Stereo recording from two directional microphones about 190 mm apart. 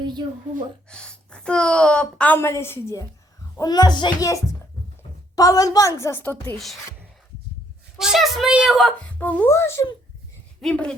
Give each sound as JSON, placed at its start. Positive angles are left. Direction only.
{"t": 0.0, "sound": "a woman's voice", "side_deg": -20}
{"t": 0.9, "sound": "a woman's voice", "side_deg": 5}
{"t": 5.4, "sound": "a woman's voice", "side_deg": 20}
{"t": 7.9, "sound": "a woman's voice", "side_deg": 0}